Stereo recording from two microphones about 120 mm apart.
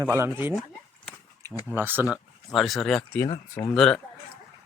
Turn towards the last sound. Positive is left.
turn(degrees=5)  # may be behind; listen again after turning